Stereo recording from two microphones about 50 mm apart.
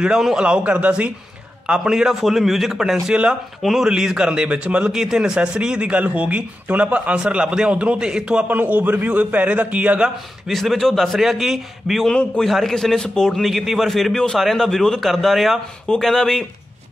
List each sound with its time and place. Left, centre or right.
0.2 s a man's voice: centre
0.7 s speech: right
1.7 s a man's voice: centre
3.1 s a man's voice: centre
3.6 s a man's voice: centre
3.9 s a man's voice: centre
8.5 s a man's voice: right
10.5 s a man's voice: centre
11.1 s a man's voice: centre
13.4 s a man's voice: centre